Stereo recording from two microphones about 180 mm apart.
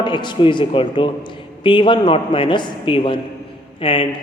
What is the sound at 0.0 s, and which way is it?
A man's voice, 25° left (ahead or behind).